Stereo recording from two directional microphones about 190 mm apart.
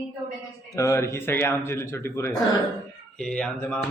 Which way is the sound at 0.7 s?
15° left (ahead or behind).